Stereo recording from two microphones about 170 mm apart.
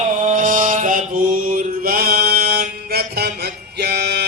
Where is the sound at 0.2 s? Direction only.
50° right (ahead or behind).